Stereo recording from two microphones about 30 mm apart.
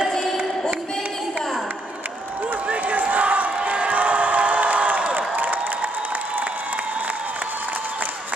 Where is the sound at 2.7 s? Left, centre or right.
Right.